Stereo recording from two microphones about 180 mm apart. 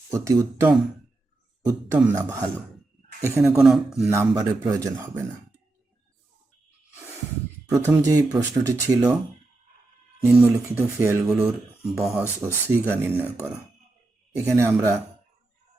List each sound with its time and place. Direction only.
0.1 s speech: 20° right (ahead or behind)
3.2 s speech: 15° right (ahead or behind)
3.6 s speech: 5° right (ahead or behind)
4.1 s speech: 15° right (ahead or behind)
7.7 s speech: 20° right (ahead or behind)
10.2 s speech: 5° right (ahead or behind)